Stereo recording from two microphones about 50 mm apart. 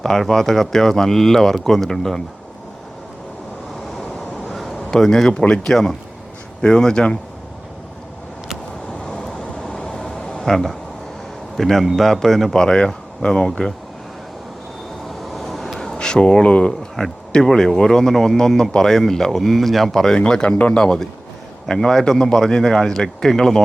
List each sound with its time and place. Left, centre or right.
0.0 s speech: centre
4.4 s a sound: centre
4.9 s speech: centre
8.9 s a sound: centre
11.5 s speech: centre
12.6 s speech: centre
15.0 s vehicle: centre
15.9 s speech: centre
21.7 s speech: centre